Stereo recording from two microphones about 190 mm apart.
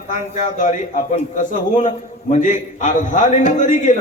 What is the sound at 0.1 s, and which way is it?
A man's voice, 40° left (ahead or behind).